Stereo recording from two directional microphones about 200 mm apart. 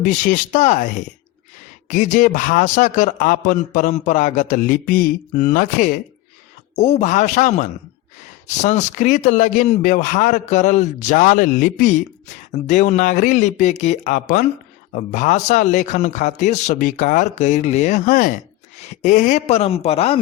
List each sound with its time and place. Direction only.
0.0 s a man's voice: 40° left (ahead or behind)